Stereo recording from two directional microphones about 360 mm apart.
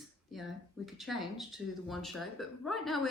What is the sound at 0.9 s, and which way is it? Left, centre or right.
Speech, centre.